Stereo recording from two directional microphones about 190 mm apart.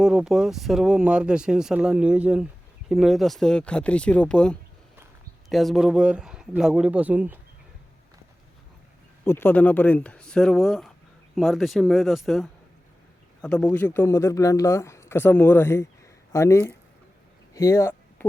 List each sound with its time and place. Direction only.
0.0 s speech: 5° right (ahead or behind)
9.2 s speech: 10° left (ahead or behind)
17.5 s a sound: 15° left (ahead or behind)